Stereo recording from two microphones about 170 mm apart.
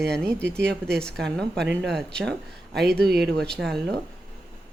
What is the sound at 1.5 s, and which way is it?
Speech, 90° right.